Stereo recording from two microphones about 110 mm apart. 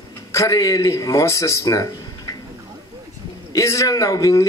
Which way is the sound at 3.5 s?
30° left (ahead or behind).